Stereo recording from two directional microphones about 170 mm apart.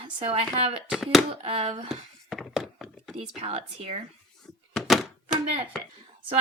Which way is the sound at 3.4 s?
35° right (ahead or behind).